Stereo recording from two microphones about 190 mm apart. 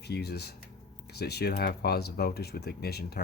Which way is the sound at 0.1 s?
60° left (ahead or behind).